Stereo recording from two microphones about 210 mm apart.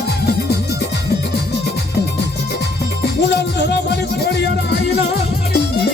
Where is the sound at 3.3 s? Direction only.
55° left (ahead or behind).